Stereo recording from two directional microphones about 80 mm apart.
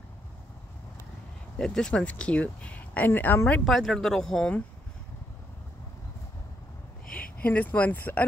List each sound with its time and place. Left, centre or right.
1.6 s speech: centre; by 3.3 s left
3.6 s speech: centre
7.1 s speech: centre